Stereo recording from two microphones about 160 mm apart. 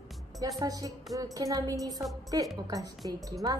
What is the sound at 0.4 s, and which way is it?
Music, 20° right (ahead or behind).